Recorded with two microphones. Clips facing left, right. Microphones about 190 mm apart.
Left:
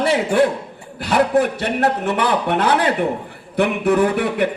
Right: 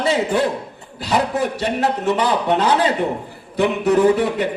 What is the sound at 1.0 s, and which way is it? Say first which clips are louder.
A man's voice: left 3 dB; 60° left (ahead or behind).